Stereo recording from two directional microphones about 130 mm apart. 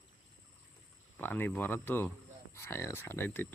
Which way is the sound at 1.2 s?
15° left (ahead or behind).